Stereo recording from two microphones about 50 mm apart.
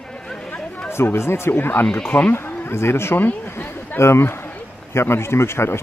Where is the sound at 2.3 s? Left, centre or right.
Left.